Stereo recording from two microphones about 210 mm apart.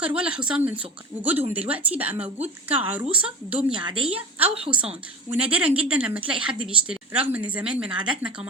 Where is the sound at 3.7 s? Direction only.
25° right (ahead or behind).